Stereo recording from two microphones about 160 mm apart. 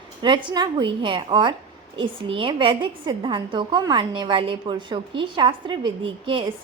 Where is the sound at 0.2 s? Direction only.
30° right (ahead or behind).